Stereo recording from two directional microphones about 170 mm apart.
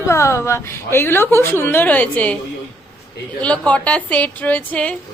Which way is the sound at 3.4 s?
5° left (ahead or behind).